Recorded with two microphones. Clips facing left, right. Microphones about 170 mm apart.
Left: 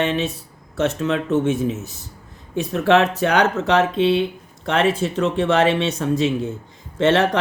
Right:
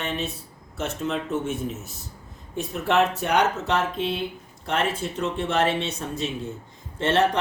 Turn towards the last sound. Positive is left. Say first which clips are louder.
# left 5 dB
turn(degrees=90)